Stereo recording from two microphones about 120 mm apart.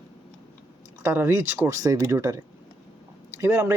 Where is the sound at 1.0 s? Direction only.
20° right (ahead or behind).